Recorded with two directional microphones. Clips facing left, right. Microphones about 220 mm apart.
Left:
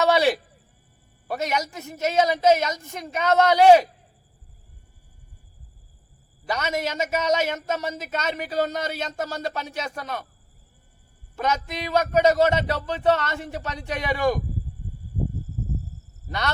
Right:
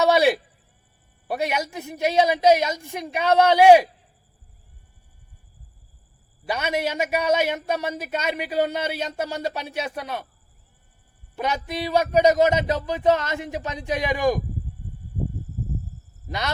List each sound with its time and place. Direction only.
0.0 s speech: 15° right (ahead or behind)
6.4 s speech: 15° right (ahead or behind)
11.3 s speech: 15° right (ahead or behind)